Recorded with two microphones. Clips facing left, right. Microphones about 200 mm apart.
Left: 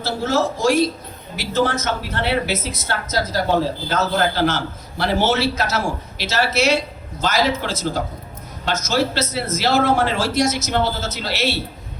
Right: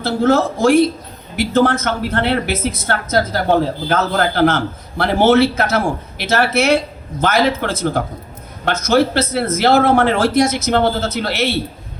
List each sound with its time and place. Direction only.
0.0 s a man's voice: 55° right (ahead or behind)